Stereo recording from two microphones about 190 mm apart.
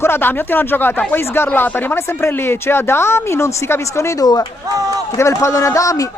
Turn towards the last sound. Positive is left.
turn(degrees=15)  # may be behind; listen again after turning